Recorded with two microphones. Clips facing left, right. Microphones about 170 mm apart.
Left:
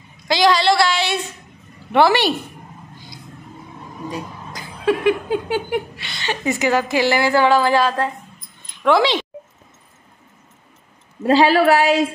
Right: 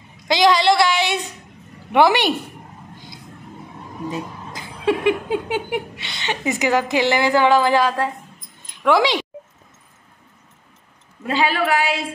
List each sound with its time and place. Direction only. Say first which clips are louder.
0.3 s a sound: even; 20° right (ahead or behind)
1.9 s a woman's voice: even; 15° right (ahead or behind)
4.1 s a woman's voice: even; 25° right (ahead or behind)
11.2 s a woman's voice: left 7 dB; 35° left (ahead or behind)